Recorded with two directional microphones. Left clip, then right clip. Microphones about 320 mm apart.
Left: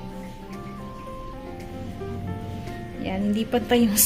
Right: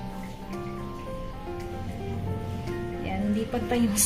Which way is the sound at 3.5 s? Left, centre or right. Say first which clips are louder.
Left 8 dB; left.